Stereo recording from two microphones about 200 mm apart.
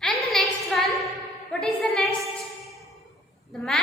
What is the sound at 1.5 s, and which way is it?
Speech, centre (ahead or behind).